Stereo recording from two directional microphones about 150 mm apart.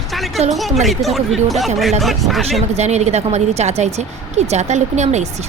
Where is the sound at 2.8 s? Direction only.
45° right (ahead or behind).